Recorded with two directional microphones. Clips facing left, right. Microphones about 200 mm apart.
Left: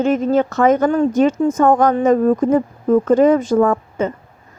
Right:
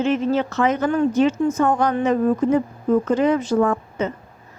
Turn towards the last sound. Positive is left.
turn(degrees=50)  # may be behind; listen again after turning